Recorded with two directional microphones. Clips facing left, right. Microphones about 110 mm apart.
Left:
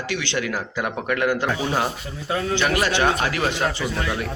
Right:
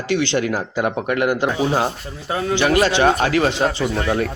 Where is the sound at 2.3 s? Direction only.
5° right (ahead or behind).